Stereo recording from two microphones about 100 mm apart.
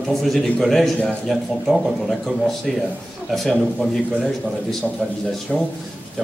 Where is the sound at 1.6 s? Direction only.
Centre (ahead or behind).